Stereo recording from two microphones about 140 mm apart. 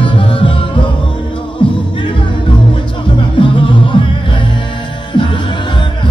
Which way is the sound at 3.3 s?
35° left (ahead or behind).